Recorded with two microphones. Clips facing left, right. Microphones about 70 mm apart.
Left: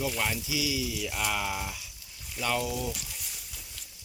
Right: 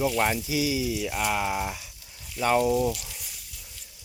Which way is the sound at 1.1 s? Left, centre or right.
Centre.